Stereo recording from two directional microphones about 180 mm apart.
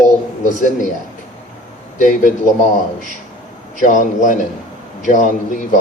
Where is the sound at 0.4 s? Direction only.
45° left (ahead or behind).